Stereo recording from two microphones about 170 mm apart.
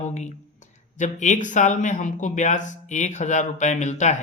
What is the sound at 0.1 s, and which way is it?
Speech, 45° left (ahead or behind).